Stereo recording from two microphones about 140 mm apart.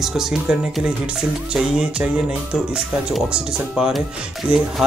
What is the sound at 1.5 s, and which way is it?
Music, 5° right (ahead or behind).